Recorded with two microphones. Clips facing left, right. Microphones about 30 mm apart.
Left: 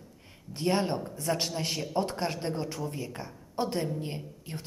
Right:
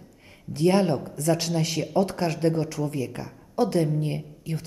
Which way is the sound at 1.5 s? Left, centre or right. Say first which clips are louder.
Right 6 dB; right.